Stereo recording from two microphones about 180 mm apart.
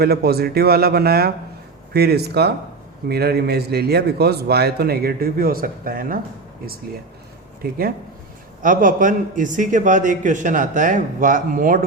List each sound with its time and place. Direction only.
0.0 s a man's voice: 60° right (ahead or behind)
7.6 s a man's voice: 60° right (ahead or behind)